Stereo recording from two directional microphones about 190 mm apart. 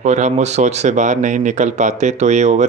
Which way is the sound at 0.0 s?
40° right (ahead or behind).